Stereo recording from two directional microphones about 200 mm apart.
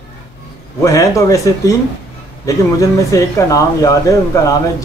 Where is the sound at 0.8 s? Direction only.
15° left (ahead or behind).